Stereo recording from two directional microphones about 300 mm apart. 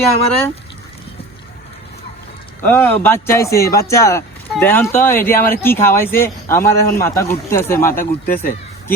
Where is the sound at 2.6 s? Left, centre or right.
Centre.